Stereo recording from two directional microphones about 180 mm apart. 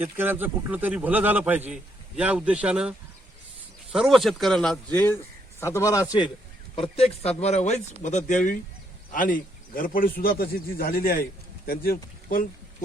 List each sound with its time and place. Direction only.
0.0 s a man's voice: 10° right (ahead or behind)
3.9 s a man's voice: centre (ahead or behind); by 12.5 s 55° left (ahead or behind)